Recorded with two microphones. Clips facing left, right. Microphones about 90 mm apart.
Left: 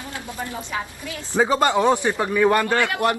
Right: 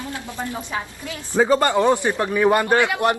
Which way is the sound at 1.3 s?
15° left (ahead or behind).